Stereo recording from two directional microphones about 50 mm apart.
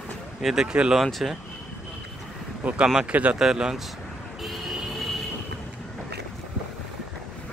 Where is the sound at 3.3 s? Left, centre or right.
Centre.